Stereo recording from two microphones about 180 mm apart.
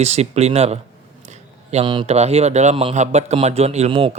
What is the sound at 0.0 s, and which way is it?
A man's voice, 35° right (ahead or behind).